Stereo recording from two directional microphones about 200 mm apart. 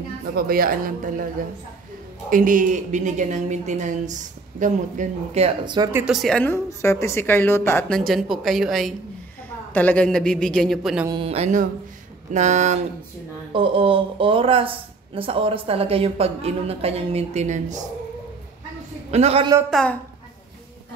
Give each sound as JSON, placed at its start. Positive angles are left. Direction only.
{"t": 0.4, "sound": "speech", "side_deg": -45}
{"t": 2.2, "sound": "a woman's voice", "side_deg": -40}
{"t": 6.0, "sound": "a woman's voice", "side_deg": 0}
{"t": 8.1, "sound": "a woman's voice", "side_deg": 0}
{"t": 11.1, "sound": "a woman's voice", "side_deg": -25}
{"t": 19.0, "sound": "a woman's voice", "side_deg": -30}
{"t": 19.7, "sound": "a woman's voice", "side_deg": 5}